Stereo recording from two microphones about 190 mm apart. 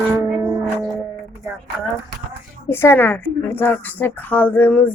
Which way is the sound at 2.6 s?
15° left (ahead or behind).